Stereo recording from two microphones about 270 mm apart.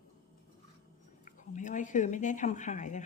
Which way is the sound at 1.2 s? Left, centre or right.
Left.